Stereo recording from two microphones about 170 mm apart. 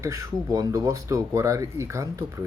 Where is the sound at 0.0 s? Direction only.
20° right (ahead or behind).